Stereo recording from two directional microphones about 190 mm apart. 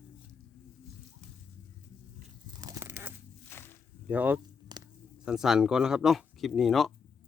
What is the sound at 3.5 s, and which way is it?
Walk, 10° left (ahead or behind).